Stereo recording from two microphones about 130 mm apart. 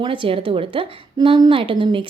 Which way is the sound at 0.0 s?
40° right (ahead or behind).